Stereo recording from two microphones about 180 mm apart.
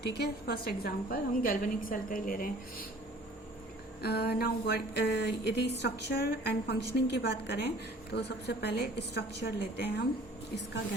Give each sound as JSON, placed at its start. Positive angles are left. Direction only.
{"t": 0.0, "sound": "a woman's voice", "side_deg": 65}
{"t": 4.0, "sound": "a woman's voice", "side_deg": 65}